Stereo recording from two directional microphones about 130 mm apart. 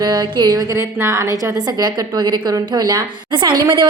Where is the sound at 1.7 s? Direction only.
35° right (ahead or behind).